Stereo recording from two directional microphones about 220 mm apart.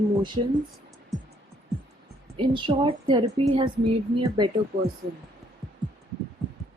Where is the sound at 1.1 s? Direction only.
Centre (ahead or behind).